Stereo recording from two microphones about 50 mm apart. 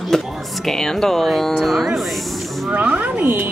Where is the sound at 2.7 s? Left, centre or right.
Right.